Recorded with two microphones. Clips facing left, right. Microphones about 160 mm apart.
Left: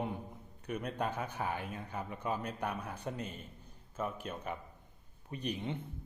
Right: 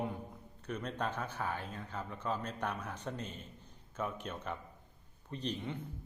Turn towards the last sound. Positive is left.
turn(degrees=20)  # may be behind; listen again after turning